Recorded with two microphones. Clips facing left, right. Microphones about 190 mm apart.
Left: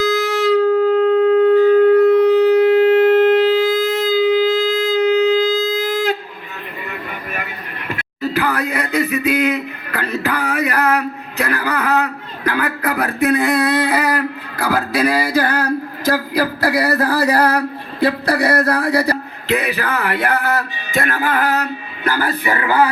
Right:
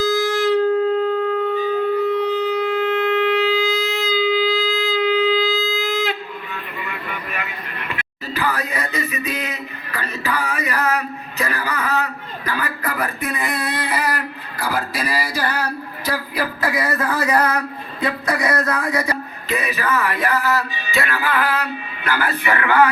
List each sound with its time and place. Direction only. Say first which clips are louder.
0.1 s wind instrument: left 2 dB; 65° left (ahead or behind)
1.3 s shofar: left 10 dB; 75° left (ahead or behind); by 6.1 s 45° left (ahead or behind)
6.8 s a sound: left 4 dB; 45° left (ahead or behind); by 14.1 s 65° left (ahead or behind)
14.5 s male singing: left 5 dB; 65° left (ahead or behind); by 19.1 s 35° left (ahead or behind)
19.5 s speech: left 3 dB; 70° left (ahead or behind); by 22.9 s 35° left (ahead or behind)